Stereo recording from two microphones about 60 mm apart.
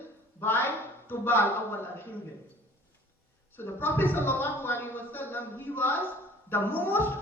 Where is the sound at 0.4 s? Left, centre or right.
Left.